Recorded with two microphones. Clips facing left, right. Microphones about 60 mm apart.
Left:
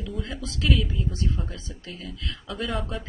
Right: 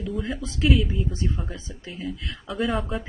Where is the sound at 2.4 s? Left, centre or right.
Centre.